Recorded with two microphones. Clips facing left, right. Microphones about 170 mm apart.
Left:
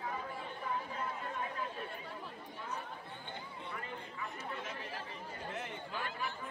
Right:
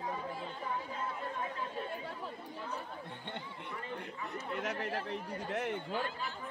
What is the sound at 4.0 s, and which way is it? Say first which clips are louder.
Chatter: right 3 dB; 70° right (ahead or behind).